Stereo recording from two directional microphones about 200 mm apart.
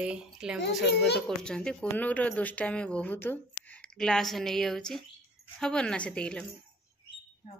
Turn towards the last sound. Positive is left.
turn(degrees=5)  # may be behind; listen again after turning